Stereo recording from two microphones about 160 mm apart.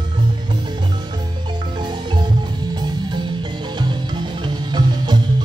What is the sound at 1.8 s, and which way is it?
Music, 30° right (ahead or behind).